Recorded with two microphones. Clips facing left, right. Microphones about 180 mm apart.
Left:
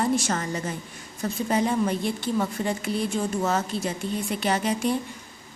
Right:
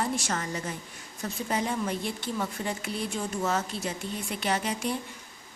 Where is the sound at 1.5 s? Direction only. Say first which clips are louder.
Left 6 dB; 40° left (ahead or behind).